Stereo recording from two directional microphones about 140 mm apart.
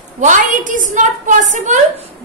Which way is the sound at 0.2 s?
65° right (ahead or behind).